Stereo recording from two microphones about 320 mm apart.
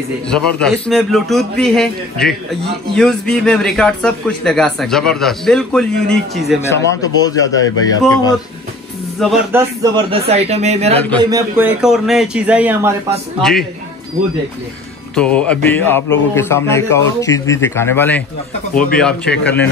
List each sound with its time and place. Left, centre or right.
0.3 s a man's voice: centre
9.2 s a man's voice: centre
9.8 s a man's voice: centre
15.1 s a man's voice: centre